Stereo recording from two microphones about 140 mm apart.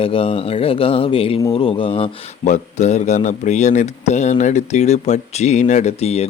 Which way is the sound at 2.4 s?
60° left (ahead or behind).